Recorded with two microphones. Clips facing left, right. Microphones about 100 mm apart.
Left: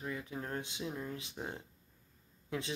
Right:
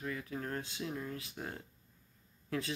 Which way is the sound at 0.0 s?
25° left (ahead or behind).